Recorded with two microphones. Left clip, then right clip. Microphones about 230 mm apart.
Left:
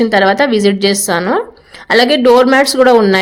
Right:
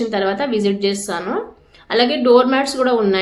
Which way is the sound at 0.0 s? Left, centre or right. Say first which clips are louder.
Left 9 dB; left.